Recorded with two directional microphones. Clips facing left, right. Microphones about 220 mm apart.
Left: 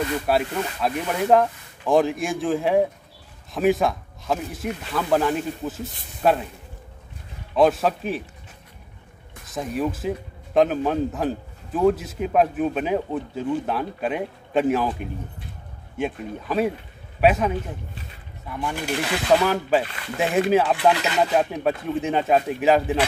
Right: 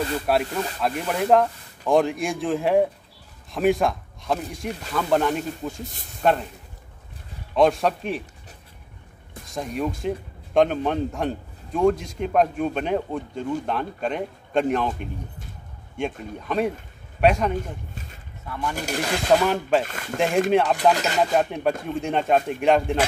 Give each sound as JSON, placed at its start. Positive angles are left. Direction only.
{"t": 0.6, "sound": "a man's voice", "side_deg": 0}
{"t": 7.5, "sound": "a man's voice", "side_deg": 0}
{"t": 9.5, "sound": "a man's voice", "side_deg": 0}
{"t": 18.5, "sound": "speech", "side_deg": 15}
{"t": 18.8, "sound": "speech", "side_deg": -45}
{"t": 19.4, "sound": "a man's voice", "side_deg": 0}
{"t": 19.8, "sound": "speech", "side_deg": -45}
{"t": 20.2, "sound": "a man's voice", "side_deg": 5}